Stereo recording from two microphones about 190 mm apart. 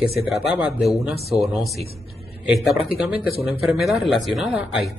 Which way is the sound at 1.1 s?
35° right (ahead or behind).